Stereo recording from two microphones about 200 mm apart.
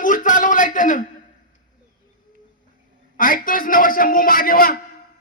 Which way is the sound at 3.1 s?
45° left (ahead or behind).